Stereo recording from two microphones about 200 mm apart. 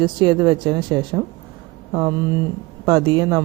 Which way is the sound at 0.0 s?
20° right (ahead or behind).